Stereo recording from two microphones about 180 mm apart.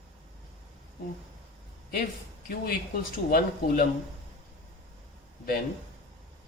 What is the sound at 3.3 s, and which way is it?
Speech, 55° left (ahead or behind).